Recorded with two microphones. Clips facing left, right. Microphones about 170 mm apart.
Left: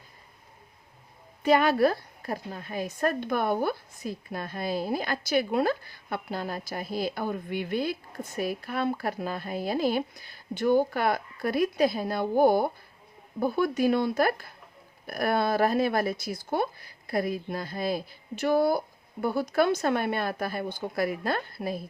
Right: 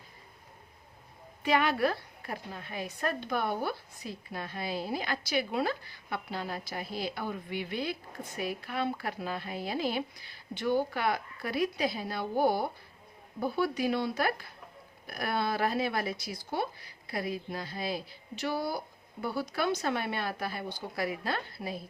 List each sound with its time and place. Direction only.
1.4 s a woman's voice: 40° left (ahead or behind)